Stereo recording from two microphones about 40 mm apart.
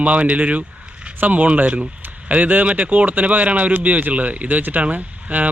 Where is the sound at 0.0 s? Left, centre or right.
Right.